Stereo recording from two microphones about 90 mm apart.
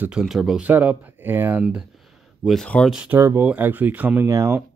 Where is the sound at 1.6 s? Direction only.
10° right (ahead or behind).